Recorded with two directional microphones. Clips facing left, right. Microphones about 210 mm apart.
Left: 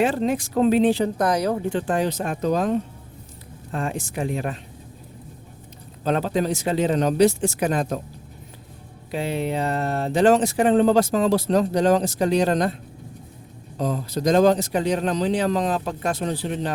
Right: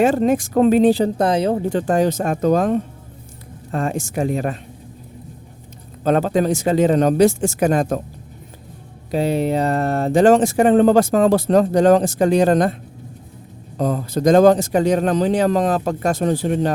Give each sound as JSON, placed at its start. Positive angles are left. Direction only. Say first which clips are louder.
{"t": 0.0, "sound": "speech", "louder": "right 6 dB", "side_deg": -45}
{"t": 1.7, "sound": "speech", "louder": "right 5 dB", "side_deg": -40}
{"t": 6.1, "sound": "speech", "louder": "right 5 dB", "side_deg": -50}
{"t": 9.1, "sound": "speech", "louder": "right 6 dB", "side_deg": -40}
{"t": 13.7, "sound": "speech", "louder": "right 5 dB", "side_deg": -50}